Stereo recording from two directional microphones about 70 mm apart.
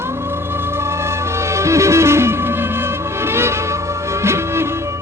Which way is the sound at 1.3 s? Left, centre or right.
Right.